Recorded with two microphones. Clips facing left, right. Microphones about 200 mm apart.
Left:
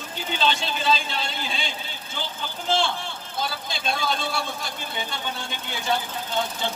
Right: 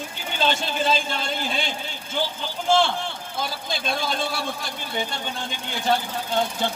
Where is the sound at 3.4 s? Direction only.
50° right (ahead or behind).